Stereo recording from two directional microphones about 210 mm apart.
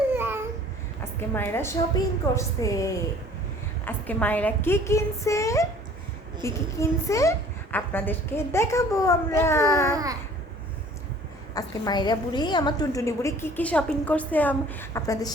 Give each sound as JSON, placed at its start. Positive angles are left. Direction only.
{"t": 0.1, "sound": "babbling", "side_deg": -10}
{"t": 1.3, "sound": "a woman's voice", "side_deg": 10}
{"t": 9.9, "sound": "babbling", "side_deg": -15}
{"t": 11.5, "sound": "a woman's voice", "side_deg": 20}